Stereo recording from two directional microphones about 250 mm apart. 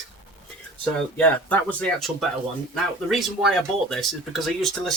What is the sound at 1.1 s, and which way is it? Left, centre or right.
Speech, centre.